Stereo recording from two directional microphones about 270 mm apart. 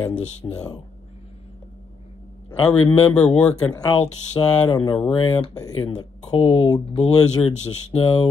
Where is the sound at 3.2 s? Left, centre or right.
Centre.